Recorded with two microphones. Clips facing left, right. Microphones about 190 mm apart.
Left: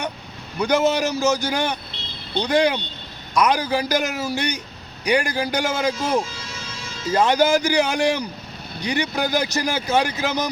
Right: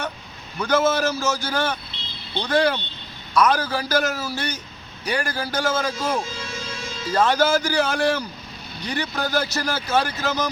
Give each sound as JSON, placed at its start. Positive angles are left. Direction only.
{"t": 0.6, "sound": "a man's voice", "side_deg": 15}